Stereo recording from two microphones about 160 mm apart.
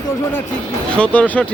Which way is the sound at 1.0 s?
10° left (ahead or behind).